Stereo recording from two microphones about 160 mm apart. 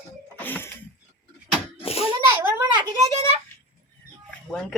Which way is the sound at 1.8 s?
35° left (ahead or behind).